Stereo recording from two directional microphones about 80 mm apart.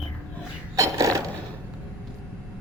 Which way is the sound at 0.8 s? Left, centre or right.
Right.